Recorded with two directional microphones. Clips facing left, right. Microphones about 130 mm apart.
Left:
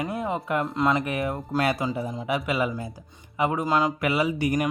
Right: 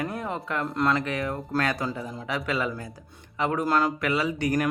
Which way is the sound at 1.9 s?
20° left (ahead or behind).